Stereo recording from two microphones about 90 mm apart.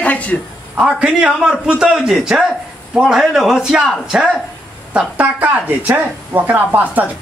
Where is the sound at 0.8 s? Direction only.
10° right (ahead or behind).